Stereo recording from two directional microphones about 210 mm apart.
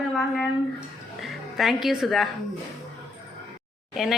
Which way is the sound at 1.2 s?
Centre (ahead or behind).